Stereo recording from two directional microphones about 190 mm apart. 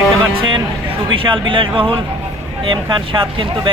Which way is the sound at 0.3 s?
25° right (ahead or behind).